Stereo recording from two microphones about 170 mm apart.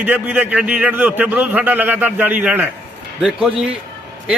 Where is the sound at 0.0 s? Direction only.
10° right (ahead or behind).